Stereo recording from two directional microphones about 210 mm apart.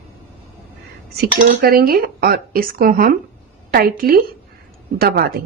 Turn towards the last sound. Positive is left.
turn(degrees=-45)  # may be behind; listen again after turning